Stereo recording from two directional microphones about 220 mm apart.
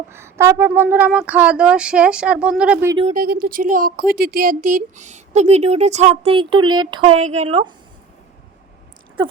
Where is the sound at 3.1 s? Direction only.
40° right (ahead or behind); by 7.7 s 25° right (ahead or behind).